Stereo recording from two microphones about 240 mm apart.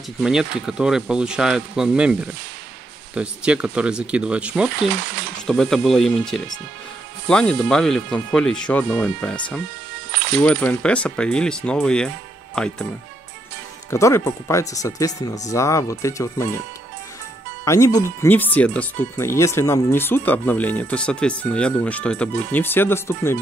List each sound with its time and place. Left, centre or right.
0.2 s speech: centre
3.2 s speech: centre
4.9 s speech: right
5.5 s speech: centre
13.8 s speech: centre
17.6 s speech: centre